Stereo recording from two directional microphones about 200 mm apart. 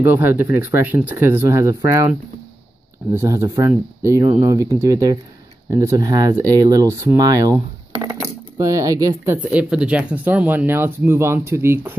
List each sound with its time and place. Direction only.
0.0 s speech: 10° right (ahead or behind)
3.1 s speech: 15° right (ahead or behind)